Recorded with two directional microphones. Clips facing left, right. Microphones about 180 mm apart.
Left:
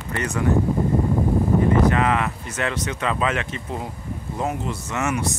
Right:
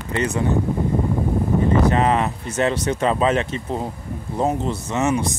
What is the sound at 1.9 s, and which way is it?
Speech, 30° right (ahead or behind).